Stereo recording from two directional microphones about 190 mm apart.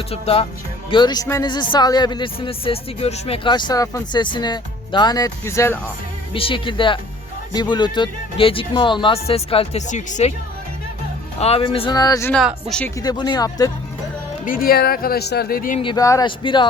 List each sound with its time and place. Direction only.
0.1 s speech: 30° left (ahead or behind); by 5.8 s 15° left (ahead or behind)
6.3 s speech: 30° left (ahead or behind)
11.3 s speech: 30° left (ahead or behind)
12.3 s speech: centre (ahead or behind)
13.0 s speech: 20° left (ahead or behind)
14.4 s speech: 50° left (ahead or behind)
15.8 s speech: 20° left (ahead or behind)